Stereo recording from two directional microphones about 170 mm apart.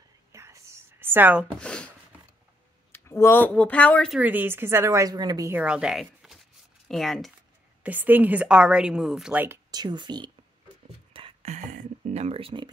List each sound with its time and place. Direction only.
0.3 s whispering: 15° right (ahead or behind)
1.6 s a sound: 5° left (ahead or behind)
2.9 s speech: 15° left (ahead or behind)
4.2 s a woman's voice: 10° right (ahead or behind)
5.6 s speech: 5° right (ahead or behind)
7.8 s a woman's voice: 10° right (ahead or behind)
9.7 s speech: 25° right (ahead or behind)
11.1 s a sound: 35° right (ahead or behind)